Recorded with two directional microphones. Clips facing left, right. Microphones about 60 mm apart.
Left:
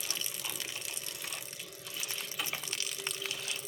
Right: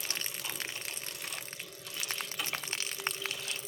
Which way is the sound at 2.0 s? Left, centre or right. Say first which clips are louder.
Right 4 dB; right.